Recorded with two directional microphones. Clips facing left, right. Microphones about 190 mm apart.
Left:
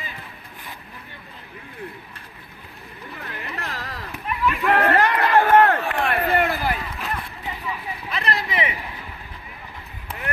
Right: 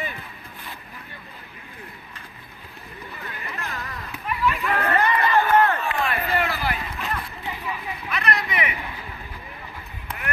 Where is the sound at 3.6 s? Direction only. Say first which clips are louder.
Even; 80° left.